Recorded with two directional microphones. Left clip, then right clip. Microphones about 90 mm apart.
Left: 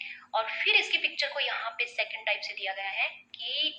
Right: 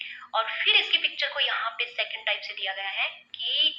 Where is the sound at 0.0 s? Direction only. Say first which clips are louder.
Right 3 dB; 35° left (ahead or behind).